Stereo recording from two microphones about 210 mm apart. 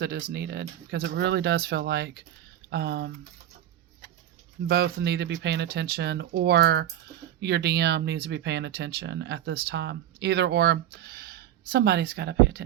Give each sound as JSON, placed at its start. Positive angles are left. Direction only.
{"t": 0.0, "sound": "speech", "side_deg": -50}
{"t": 4.7, "sound": "speech", "side_deg": -55}